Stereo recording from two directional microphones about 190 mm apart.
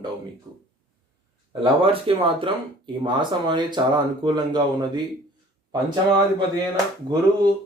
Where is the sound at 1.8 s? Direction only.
30° right (ahead or behind).